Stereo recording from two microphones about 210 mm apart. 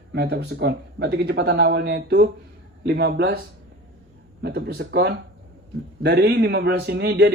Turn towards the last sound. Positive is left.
turn(degrees=-50)  # may be behind; listen again after turning